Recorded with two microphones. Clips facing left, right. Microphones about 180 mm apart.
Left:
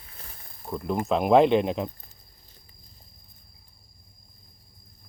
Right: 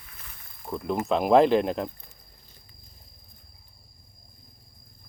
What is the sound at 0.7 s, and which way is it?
Speech, centre (ahead or behind).